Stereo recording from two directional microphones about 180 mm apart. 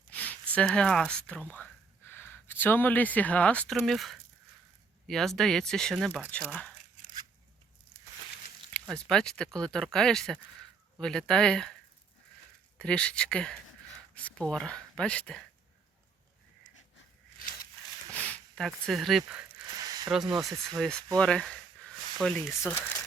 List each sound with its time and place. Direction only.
0.1 s speech: 10° left (ahead or behind)
8.7 s speech: 5° left (ahead or behind)
12.8 s speech: 5° left (ahead or behind)
18.1 s speech: 5° left (ahead or behind)
19.7 s a sound: 20° right (ahead or behind)
20.1 s speech: 5° right (ahead or behind)